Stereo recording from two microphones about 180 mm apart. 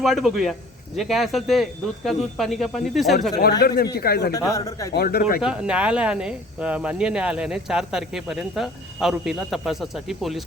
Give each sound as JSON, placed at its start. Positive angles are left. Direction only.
{"t": 0.0, "sound": "speech", "side_deg": 0}
{"t": 3.6, "sound": "a man's voice", "side_deg": 55}
{"t": 4.4, "sound": "a man's voice", "side_deg": 20}
{"t": 4.9, "sound": "a man's voice", "side_deg": 60}
{"t": 5.4, "sound": "speech", "side_deg": -5}